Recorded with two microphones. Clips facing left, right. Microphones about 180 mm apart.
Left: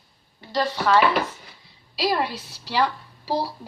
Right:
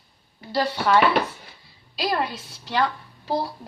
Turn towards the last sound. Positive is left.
turn(degrees=0)  # may be behind; listen again after turning